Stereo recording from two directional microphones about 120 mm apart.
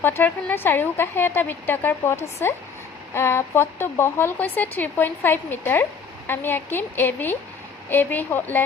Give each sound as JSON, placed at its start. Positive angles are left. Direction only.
{"t": 0.0, "sound": "speech", "side_deg": 15}